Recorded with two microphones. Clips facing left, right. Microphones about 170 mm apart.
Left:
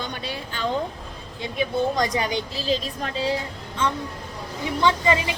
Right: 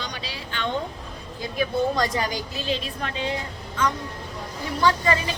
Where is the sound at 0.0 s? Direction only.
55° left (ahead or behind).